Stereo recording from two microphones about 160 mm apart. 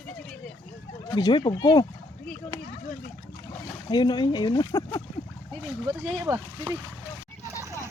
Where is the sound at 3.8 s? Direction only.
30° left (ahead or behind).